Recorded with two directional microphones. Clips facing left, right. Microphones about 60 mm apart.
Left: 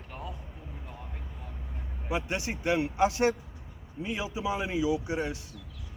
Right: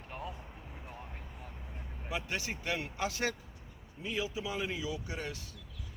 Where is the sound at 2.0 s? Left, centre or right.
Left.